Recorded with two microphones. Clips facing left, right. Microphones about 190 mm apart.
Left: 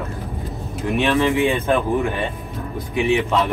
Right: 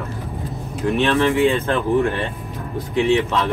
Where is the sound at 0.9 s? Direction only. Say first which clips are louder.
Even; 15° left (ahead or behind).